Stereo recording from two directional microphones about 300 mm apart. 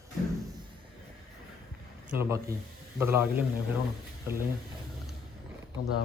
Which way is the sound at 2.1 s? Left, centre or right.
Centre.